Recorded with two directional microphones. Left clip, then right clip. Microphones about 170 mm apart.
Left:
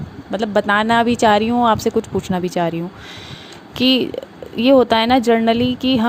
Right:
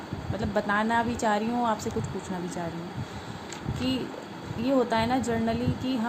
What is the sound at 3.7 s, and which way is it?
Speech, 55° left (ahead or behind).